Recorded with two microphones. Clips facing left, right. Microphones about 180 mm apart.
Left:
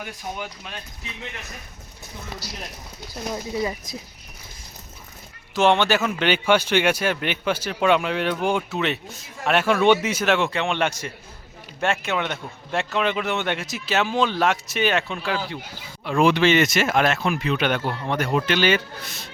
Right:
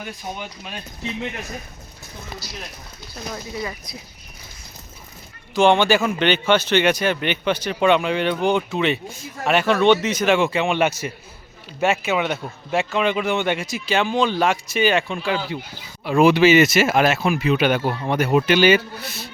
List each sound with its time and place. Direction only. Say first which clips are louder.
3.3 s speech: left 4 dB; 20° left (ahead or behind)
5.5 s a man's voice: right 3 dB; centre (ahead or behind)